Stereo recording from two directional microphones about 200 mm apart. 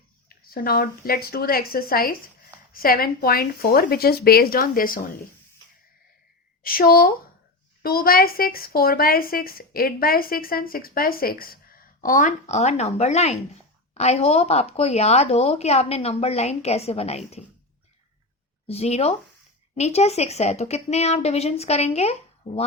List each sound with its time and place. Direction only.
0.3 s speech: 50° left (ahead or behind)
6.6 s speech: 45° left (ahead or behind); by 17.4 s 30° left (ahead or behind)
18.7 s speech: 30° left (ahead or behind)